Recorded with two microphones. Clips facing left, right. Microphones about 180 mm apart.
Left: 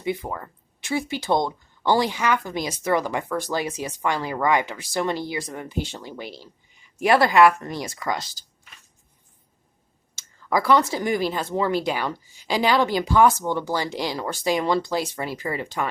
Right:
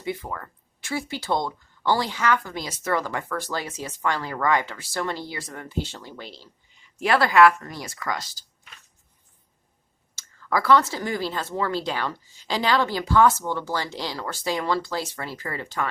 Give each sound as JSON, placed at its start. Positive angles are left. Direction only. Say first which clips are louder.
{"t": 0.0, "sound": "speech", "louder": "left 3 dB", "side_deg": 20}
{"t": 10.2, "sound": "speech", "louder": "left 2 dB", "side_deg": 15}